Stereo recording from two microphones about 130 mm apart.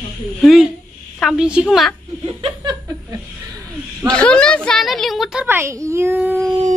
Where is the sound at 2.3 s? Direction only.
40° right (ahead or behind).